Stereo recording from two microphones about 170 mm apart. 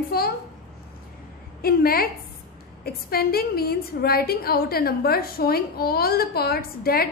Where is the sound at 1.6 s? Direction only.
60° left (ahead or behind).